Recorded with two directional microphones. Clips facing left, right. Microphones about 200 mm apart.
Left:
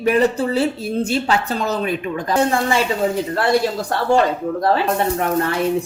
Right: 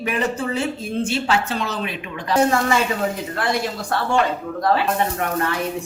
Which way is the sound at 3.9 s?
35° left (ahead or behind).